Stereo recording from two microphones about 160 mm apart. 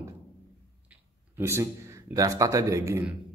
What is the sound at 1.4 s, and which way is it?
A man's voice, 15° right (ahead or behind).